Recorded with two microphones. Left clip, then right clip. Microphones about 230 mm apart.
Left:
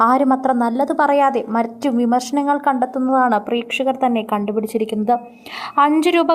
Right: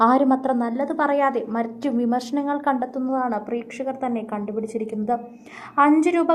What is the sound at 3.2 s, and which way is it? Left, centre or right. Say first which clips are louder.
A woman's voice: left 8 dB; left.